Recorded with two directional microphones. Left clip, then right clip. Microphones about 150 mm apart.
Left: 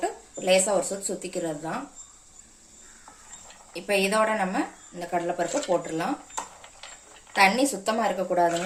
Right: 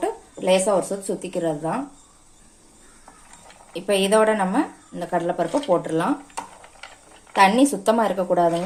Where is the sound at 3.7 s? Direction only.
45° right (ahead or behind).